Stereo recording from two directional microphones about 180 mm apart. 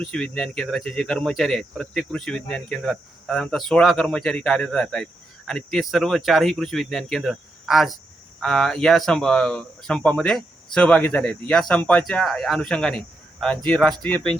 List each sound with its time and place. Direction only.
0.0 s speech: 5° left (ahead or behind)